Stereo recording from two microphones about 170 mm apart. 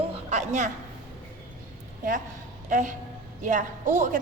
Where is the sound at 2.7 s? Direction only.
50° right (ahead or behind).